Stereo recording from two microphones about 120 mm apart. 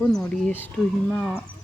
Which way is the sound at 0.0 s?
5° left (ahead or behind).